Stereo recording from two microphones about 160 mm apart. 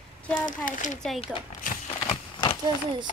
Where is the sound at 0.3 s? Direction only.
55° left (ahead or behind).